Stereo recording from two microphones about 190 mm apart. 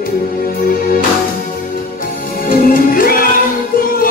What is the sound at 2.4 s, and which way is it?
Music, 50° left (ahead or behind).